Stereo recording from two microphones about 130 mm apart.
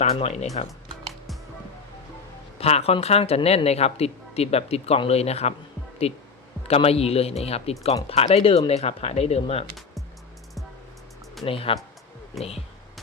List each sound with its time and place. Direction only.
0.0 s speech: 50° left (ahead or behind)
2.6 s speech: 50° left (ahead or behind)
11.4 s speech: 45° left (ahead or behind)